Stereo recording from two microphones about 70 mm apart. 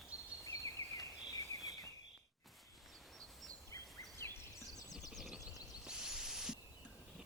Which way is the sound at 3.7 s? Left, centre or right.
Left.